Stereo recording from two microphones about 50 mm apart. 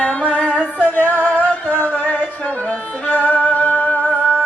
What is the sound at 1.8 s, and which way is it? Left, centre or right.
Music, left.